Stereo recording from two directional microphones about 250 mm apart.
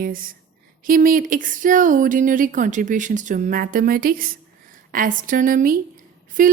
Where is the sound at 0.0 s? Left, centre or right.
Right.